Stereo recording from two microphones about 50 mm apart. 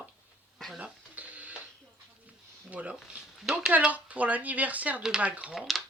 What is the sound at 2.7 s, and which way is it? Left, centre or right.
Speech, right.